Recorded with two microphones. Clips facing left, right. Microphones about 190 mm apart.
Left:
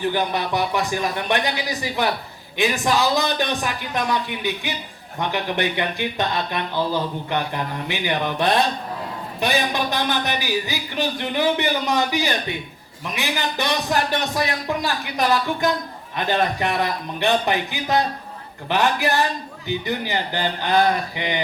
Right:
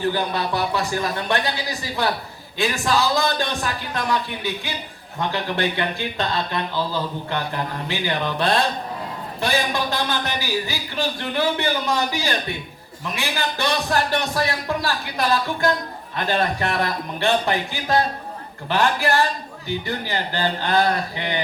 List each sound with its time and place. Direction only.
0.0 s speech: 15° left (ahead or behind)